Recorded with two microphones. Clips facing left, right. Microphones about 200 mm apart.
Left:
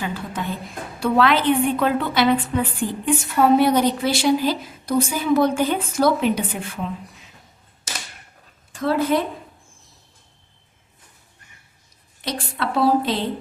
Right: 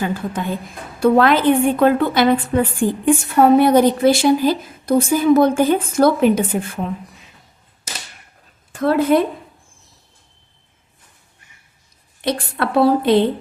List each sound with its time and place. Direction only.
0.0 s a woman's voice: 50° right (ahead or behind)
8.7 s a woman's voice: 55° right (ahead or behind)
12.2 s a woman's voice: 55° right (ahead or behind)